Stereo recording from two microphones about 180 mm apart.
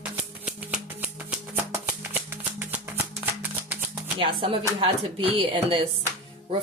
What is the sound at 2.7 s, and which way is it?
Music, 10° right (ahead or behind).